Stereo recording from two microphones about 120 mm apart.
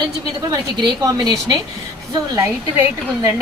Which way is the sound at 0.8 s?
35° right (ahead or behind).